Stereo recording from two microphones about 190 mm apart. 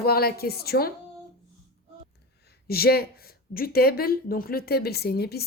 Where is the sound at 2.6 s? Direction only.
55° left (ahead or behind).